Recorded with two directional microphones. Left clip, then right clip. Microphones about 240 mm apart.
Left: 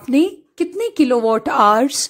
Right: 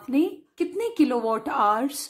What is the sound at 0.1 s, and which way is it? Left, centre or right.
A woman's voice, left.